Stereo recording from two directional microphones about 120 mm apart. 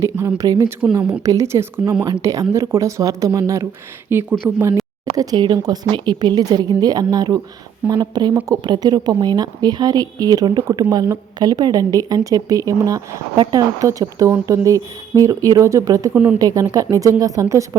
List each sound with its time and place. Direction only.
0.3 s speech: 30° right (ahead or behind)
4.1 s speech: 15° right (ahead or behind)
5.1 s a woman's voice: 30° right (ahead or behind)